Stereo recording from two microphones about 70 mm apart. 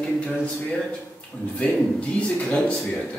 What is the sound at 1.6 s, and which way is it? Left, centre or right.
A man's voice, centre.